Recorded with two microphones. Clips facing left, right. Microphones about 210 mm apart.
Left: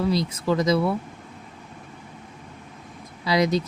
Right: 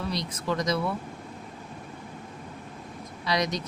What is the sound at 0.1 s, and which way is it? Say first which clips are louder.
Speech: left 7 dB; 25° left (ahead or behind).